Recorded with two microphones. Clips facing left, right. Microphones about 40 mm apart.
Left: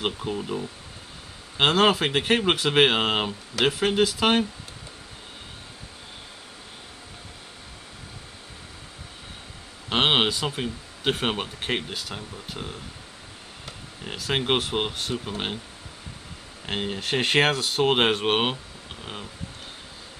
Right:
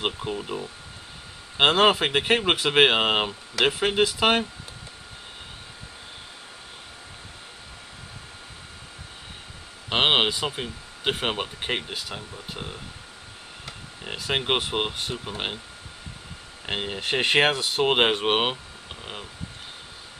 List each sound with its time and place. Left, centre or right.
0.0 s speech: centre
1.6 s speech: centre
9.8 s speech: centre
16.6 s speech: centre